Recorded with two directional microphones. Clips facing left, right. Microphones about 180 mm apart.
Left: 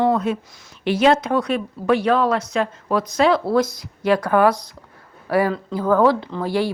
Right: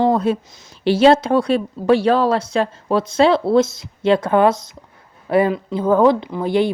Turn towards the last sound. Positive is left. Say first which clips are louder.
# right 4 dB
turn(degrees=-20)  # may be behind; listen again after turning